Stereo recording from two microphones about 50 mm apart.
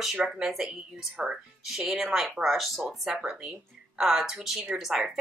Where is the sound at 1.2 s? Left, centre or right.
Right.